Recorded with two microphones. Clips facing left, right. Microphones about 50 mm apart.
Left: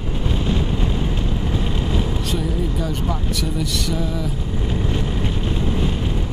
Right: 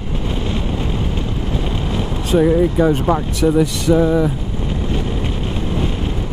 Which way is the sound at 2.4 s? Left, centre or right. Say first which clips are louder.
Right 11 dB; right.